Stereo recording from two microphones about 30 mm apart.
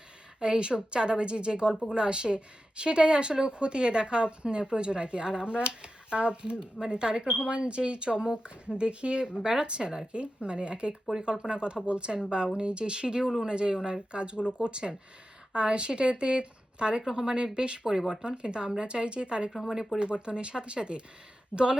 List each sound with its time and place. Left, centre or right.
0.3 s speech: right
19.5 s speech: centre
20.0 s speech: right